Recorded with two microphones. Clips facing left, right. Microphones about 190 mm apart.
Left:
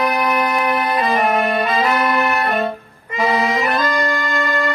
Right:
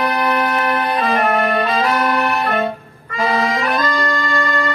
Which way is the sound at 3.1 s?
20° left (ahead or behind).